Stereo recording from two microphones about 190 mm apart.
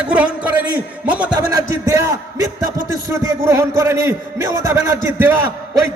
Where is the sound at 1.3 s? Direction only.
15° right (ahead or behind).